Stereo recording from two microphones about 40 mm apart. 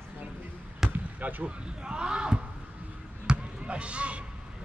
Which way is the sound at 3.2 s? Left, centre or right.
Right.